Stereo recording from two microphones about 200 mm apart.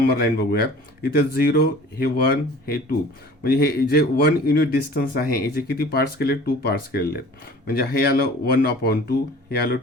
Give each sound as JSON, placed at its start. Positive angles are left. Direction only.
{"t": 0.0, "sound": "speech", "side_deg": 50}